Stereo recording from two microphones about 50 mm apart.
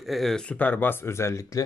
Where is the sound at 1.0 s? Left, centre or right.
Left.